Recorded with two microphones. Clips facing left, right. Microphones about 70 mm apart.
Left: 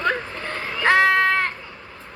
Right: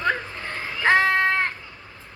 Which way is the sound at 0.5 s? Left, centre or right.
Left.